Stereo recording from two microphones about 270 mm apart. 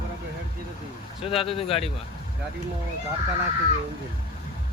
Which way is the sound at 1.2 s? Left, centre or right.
Left.